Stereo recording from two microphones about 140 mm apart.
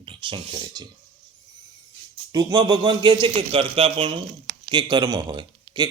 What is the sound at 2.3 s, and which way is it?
A man's voice, 30° right (ahead or behind).